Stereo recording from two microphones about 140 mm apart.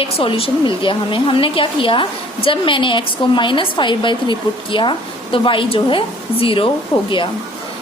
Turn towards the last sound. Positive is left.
turn(degrees=40)  # may be behind; listen again after turning